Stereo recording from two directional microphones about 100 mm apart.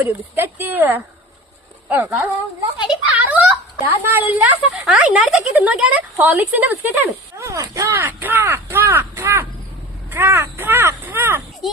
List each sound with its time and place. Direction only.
0.0 s speech: 20° right (ahead or behind)
2.8 s a sound: 10° right (ahead or behind)
4.3 s speech: 15° right (ahead or behind)
7.3 s a sound: 30° right (ahead or behind)
7.7 s speech: 30° right (ahead or behind)
7.9 s speech: 20° right (ahead or behind)